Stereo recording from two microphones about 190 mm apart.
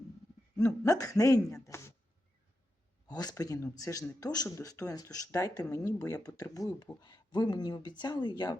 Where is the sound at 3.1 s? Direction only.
20° left (ahead or behind).